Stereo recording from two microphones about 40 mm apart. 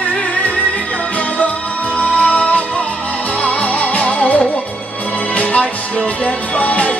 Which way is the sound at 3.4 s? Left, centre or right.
Left.